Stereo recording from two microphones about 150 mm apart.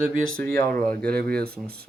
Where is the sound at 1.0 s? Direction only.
90° right.